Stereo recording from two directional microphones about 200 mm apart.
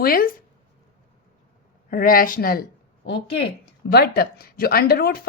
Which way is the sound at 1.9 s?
45° left (ahead or behind).